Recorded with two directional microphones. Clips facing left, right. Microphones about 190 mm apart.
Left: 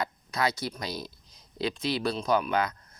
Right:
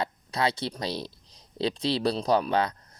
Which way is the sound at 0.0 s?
30° right (ahead or behind).